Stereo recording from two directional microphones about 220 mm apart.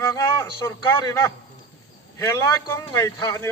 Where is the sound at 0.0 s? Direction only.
15° left (ahead or behind).